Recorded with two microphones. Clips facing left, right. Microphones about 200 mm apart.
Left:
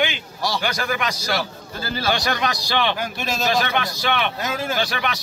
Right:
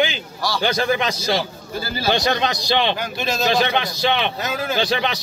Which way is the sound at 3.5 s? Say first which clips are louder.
Right 2 dB; 20° right (ahead or behind).